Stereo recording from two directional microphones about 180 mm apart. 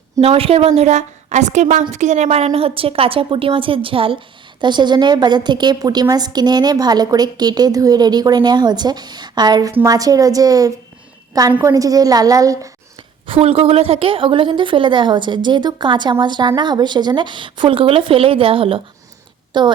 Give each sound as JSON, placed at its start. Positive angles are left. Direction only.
{"t": 0.2, "sound": "a woman's voice", "side_deg": -30}
{"t": 13.2, "sound": "a woman's voice", "side_deg": -30}